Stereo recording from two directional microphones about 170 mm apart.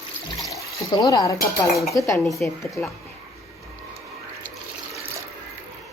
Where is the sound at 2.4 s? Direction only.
10° left (ahead or behind).